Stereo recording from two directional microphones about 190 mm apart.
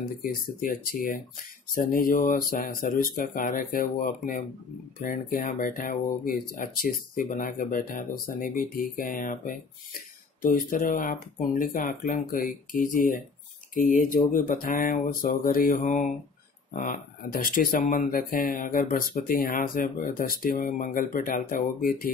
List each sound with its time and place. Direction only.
0.2 s speech: 50° left (ahead or behind)